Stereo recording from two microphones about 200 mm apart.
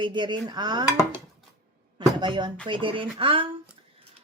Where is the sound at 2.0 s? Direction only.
25° right (ahead or behind).